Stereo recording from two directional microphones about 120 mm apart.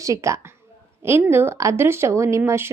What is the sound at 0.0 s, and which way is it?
A woman's voice, 25° right (ahead or behind).